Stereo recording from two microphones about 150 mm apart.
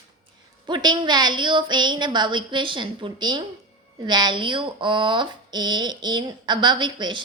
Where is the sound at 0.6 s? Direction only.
30° right (ahead or behind).